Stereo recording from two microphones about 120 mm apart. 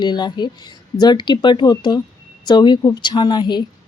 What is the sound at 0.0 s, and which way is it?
Speech, 40° left (ahead or behind).